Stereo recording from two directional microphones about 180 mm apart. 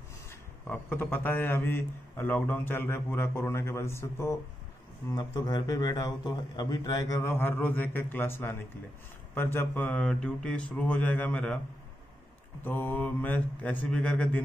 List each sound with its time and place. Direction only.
0.3 s a man's voice: 10° left (ahead or behind)
12.6 s a man's voice: 10° left (ahead or behind)